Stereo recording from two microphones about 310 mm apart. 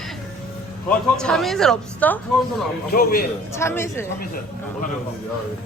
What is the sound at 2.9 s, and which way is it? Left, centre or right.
Speech, left.